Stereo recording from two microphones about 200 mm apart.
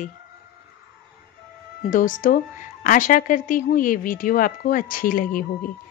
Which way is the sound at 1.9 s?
40° left (ahead or behind).